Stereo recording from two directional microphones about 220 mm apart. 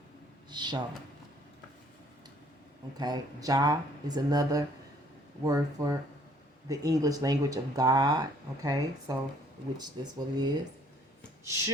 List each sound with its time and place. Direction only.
0.5 s speech: 20° right (ahead or behind)
3.0 s speech: 15° right (ahead or behind)